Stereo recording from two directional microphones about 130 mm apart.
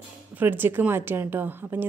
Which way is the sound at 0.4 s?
15° right (ahead or behind).